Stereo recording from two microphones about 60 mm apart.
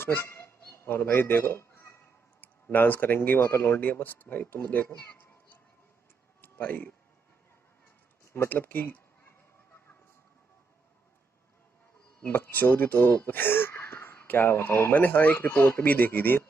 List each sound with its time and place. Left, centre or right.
0.0 s fowl: left
2.0 s a sound: left
3.3 s speech: left
6.4 s a sound: left
8.5 s speech: left
12.2 s speech: left